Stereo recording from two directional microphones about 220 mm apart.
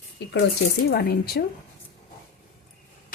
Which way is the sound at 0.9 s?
45° left (ahead or behind).